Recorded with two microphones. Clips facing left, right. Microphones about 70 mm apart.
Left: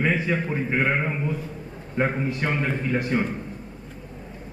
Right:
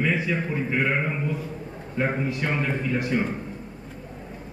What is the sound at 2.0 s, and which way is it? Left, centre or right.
Speech, left.